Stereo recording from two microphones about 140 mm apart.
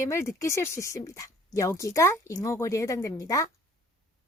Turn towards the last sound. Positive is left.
turn(degrees=25)  # may be behind; listen again after turning